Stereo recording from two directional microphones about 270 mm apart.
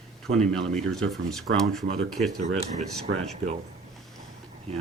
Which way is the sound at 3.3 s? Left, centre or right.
Right.